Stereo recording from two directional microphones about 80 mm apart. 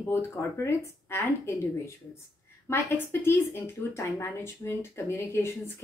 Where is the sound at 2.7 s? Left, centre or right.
Left.